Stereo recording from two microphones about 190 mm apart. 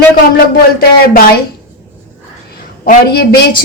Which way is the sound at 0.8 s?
50° left (ahead or behind).